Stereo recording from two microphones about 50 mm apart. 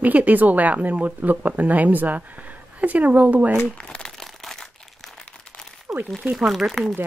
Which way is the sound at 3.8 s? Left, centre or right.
Centre.